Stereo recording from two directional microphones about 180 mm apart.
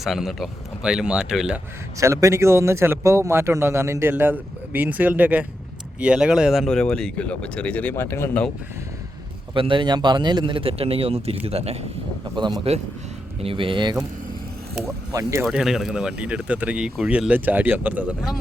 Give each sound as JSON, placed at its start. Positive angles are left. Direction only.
{"t": 0.0, "sound": "speech", "side_deg": 0}
{"t": 2.0, "sound": "a man's voice", "side_deg": -15}
{"t": 9.6, "sound": "speech", "side_deg": -25}
{"t": 12.4, "sound": "speech", "side_deg": -25}
{"t": 14.8, "sound": "a man's voice", "side_deg": -15}
{"t": 15.4, "sound": "a man's voice", "side_deg": -5}